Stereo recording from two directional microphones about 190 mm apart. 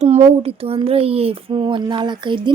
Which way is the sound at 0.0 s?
35° right (ahead or behind).